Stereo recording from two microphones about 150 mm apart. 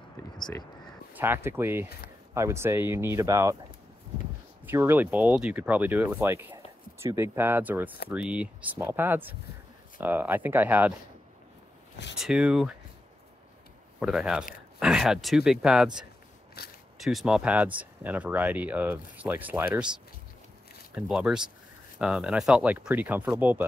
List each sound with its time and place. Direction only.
1.1 s speech: 15° right (ahead or behind)
4.6 s speech: 15° right (ahead or behind)
12.2 s speech: 5° right (ahead or behind)
13.9 s speech: 5° right (ahead or behind)
16.6 s speech: 90° left
17.0 s speech: centre (ahead or behind)
20.9 s speech: 5° right (ahead or behind)